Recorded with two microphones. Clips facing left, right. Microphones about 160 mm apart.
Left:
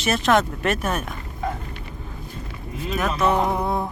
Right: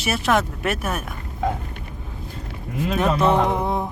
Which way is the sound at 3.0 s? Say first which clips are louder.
Right 2 dB; 30° right (ahead or behind).